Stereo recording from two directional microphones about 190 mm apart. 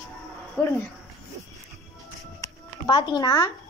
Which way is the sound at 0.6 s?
10° left (ahead or behind).